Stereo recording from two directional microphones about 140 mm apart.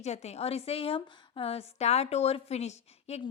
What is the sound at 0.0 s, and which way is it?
A woman's voice, 50° left (ahead or behind).